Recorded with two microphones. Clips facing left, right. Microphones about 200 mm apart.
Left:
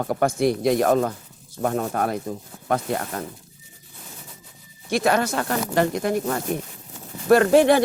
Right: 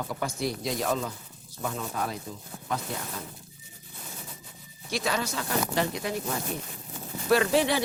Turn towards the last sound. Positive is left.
turn(degrees=50)  # may be behind; listen again after turning